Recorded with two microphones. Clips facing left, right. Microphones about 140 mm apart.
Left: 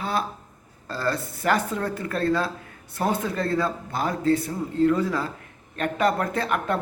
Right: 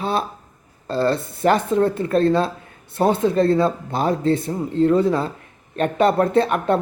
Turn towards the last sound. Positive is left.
turn(degrees=-25)  # may be behind; listen again after turning